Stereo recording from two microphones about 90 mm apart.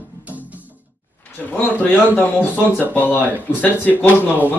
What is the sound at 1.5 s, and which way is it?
Speech, 20° left (ahead or behind).